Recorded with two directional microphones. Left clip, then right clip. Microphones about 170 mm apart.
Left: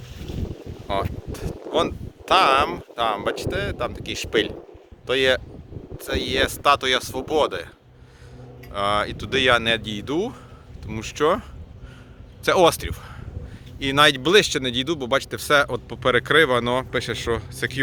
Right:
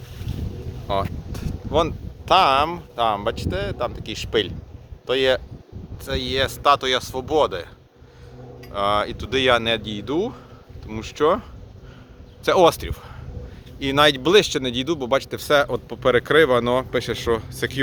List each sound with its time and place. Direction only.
0.2 s boat: 45° right (ahead or behind)
0.9 s speech: centre (ahead or behind)
8.7 s speech: 5° left (ahead or behind); by 17.7 s 20° right (ahead or behind)